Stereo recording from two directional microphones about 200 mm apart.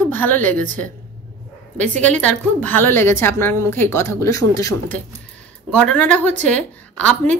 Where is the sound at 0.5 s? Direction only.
40° right (ahead or behind).